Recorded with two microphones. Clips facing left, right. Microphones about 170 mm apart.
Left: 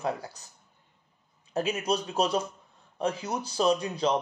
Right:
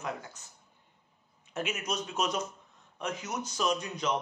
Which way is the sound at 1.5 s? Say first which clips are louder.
Left 7 dB; 35° left (ahead or behind).